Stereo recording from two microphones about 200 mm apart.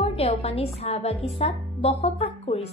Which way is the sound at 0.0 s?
30° left (ahead or behind).